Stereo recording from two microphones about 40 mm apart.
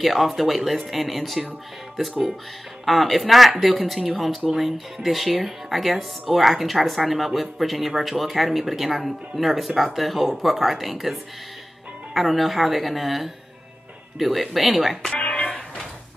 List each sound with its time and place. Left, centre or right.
0.0 s speech: centre
2.8 s speech: centre
15.1 s music: left